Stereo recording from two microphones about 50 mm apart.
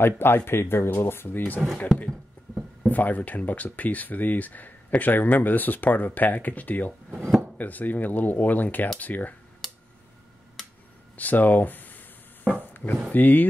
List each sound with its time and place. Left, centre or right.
0.0 s speech: left
2.5 s a sound: centre
2.9 s speech: left
11.1 s speech: left
12.5 s a sound: left
13.1 s speech: left